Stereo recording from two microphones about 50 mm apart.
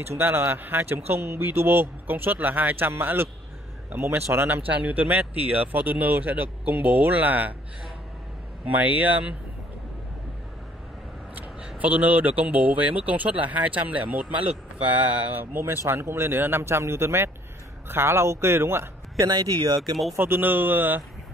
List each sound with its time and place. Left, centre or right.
0.0 s speech: right
0.6 s speech: right
4.6 s speech: right
8.6 s speech: right
11.8 s speech: right
15.3 s speech: right
19.8 s speech: centre
20.2 s speech: right